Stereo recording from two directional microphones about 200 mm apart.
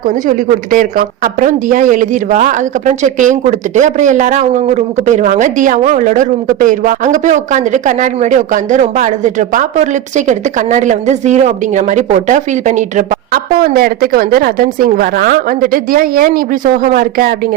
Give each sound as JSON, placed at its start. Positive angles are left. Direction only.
{"t": 0.0, "sound": "a woman's voice", "side_deg": -45}